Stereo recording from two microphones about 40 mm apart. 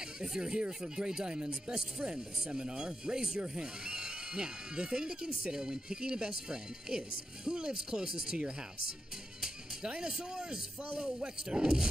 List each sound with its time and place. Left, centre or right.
0.0 s speech: centre
9.8 s speech: right